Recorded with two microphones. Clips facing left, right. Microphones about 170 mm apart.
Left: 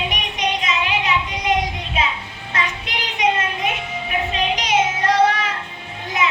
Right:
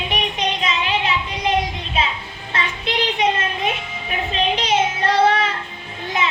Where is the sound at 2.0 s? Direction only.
30° right (ahead or behind).